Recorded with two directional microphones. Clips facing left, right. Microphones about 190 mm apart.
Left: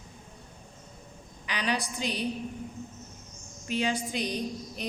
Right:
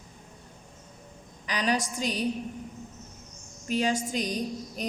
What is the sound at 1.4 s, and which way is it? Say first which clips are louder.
Speech: right 3 dB; 40° right (ahead or behind).